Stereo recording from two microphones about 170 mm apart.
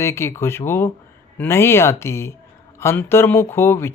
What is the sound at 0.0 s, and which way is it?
Speech, 15° left (ahead or behind).